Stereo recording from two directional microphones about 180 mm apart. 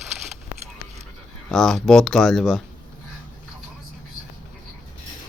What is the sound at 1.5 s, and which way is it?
Speech, 5° left (ahead or behind).